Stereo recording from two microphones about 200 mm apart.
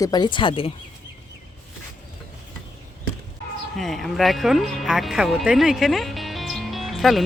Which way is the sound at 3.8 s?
Centre (ahead or behind).